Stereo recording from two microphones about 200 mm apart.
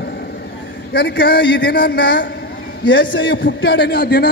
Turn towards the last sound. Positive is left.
turn(degrees=55)  # may be behind; listen again after turning